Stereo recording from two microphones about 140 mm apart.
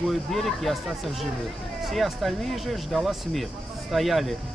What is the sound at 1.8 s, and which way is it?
Speech, centre (ahead or behind).